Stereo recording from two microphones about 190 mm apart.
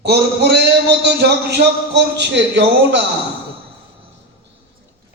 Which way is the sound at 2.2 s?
70° right (ahead or behind).